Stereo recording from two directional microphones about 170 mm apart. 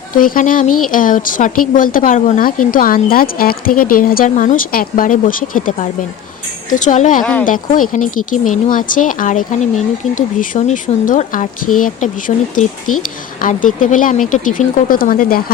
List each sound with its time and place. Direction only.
0.2 s speech: 55° left (ahead or behind)